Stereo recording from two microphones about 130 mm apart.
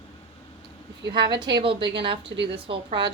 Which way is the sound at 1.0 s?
35° right (ahead or behind).